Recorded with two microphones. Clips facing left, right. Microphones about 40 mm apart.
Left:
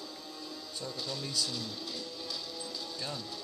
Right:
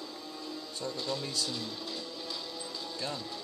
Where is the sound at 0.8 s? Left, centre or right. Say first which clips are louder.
Right 4 dB; centre.